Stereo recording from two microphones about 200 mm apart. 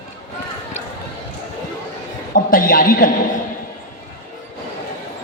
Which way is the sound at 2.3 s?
45° left (ahead or behind).